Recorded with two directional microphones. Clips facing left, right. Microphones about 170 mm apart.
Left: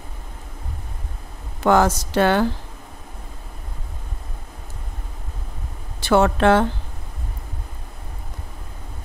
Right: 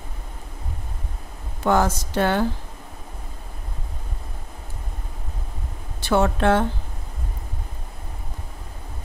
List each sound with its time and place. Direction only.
1.6 s speech: 90° left
5.9 s a woman's voice: 90° left